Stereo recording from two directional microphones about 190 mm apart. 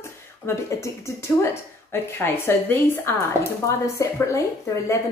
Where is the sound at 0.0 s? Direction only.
15° left (ahead or behind).